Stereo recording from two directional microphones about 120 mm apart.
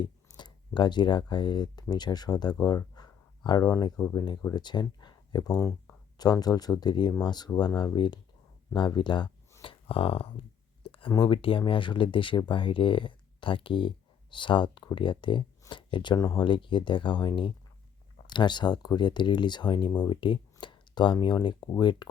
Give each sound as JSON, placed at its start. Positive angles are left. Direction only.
{"t": 0.0, "sound": "speech", "side_deg": 40}
{"t": 9.9, "sound": "speech", "side_deg": 50}
{"t": 10.8, "sound": "a sound", "side_deg": 50}
{"t": 11.1, "sound": "speech", "side_deg": 45}